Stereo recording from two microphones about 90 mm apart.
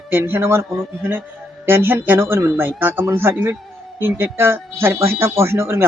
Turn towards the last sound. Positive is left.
turn(degrees=-30)  # may be behind; listen again after turning